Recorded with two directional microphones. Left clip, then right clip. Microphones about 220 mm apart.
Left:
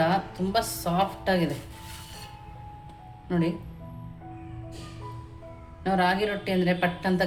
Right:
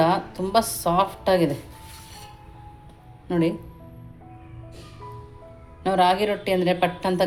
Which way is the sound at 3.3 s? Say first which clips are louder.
Right 5 dB; 30° right (ahead or behind).